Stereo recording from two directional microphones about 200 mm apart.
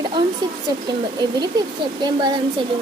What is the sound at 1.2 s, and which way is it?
Speech, 20° right (ahead or behind).